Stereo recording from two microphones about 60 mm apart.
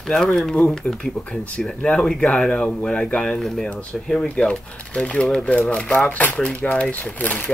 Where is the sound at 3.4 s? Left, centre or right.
Centre.